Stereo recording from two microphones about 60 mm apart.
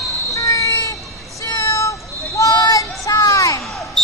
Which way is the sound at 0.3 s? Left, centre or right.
Left.